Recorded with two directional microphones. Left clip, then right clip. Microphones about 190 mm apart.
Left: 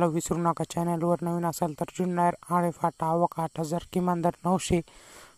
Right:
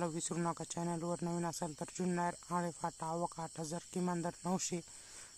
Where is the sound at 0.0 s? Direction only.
35° left (ahead or behind).